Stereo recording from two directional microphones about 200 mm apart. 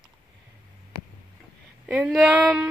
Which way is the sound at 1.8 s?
5° right (ahead or behind).